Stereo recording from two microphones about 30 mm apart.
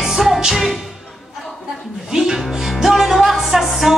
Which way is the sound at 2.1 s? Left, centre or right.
Right.